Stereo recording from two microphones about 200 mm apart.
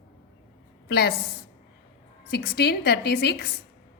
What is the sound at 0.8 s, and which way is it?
Speech, 55° left (ahead or behind).